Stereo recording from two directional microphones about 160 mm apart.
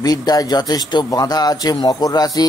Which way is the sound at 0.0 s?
25° left (ahead or behind).